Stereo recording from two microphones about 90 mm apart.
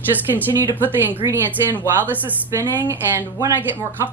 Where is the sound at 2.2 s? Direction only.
20° right (ahead or behind).